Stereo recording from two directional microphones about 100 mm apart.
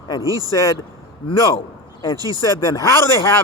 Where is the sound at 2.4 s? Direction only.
30° left (ahead or behind).